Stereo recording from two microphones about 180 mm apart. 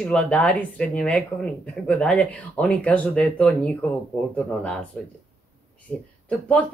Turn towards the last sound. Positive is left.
turn(degrees=5)  # may be behind; listen again after turning